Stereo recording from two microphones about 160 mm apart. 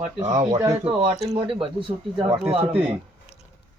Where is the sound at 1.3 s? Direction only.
35° right (ahead or behind).